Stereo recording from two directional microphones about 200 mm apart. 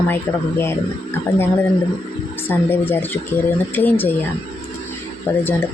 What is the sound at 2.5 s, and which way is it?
Speech, 10° left (ahead or behind).